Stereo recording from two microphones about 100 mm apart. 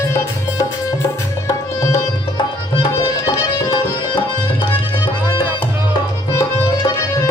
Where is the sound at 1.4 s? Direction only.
30° left (ahead or behind).